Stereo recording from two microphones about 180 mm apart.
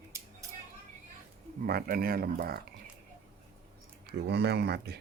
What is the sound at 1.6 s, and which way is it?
Speech, 55° right (ahead or behind).